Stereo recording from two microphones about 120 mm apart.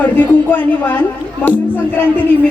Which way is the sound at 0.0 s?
15° left (ahead or behind).